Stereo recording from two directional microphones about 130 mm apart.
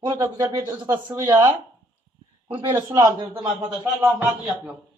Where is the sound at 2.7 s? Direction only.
20° right (ahead or behind).